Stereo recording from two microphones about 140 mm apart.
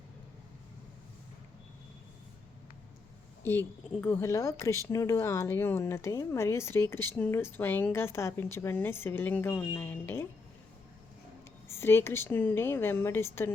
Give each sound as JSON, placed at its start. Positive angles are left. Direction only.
{"t": 3.4, "sound": "a woman's voice", "side_deg": 15}
{"t": 11.7, "sound": "speech", "side_deg": 15}